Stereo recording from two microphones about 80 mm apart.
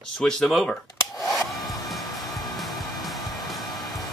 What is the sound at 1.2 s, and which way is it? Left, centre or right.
Hair dryer, centre.